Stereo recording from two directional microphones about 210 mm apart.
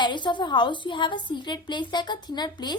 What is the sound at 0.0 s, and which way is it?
A woman's voice, 20° left (ahead or behind).